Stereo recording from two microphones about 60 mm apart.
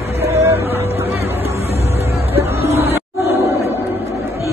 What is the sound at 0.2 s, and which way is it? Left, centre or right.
Music, right.